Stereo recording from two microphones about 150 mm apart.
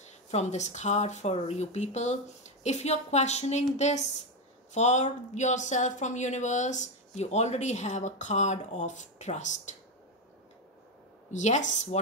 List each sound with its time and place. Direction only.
0.0 s a woman's voice: 50° left (ahead or behind)
11.3 s a woman's voice: 55° left (ahead or behind)